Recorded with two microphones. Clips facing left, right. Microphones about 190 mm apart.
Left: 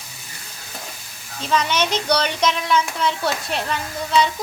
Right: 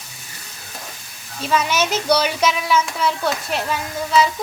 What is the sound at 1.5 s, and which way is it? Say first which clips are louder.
Speech: right 1 dB; 5° right (ahead or behind).